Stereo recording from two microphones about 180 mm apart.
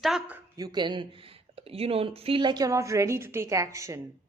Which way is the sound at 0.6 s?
25° right (ahead or behind).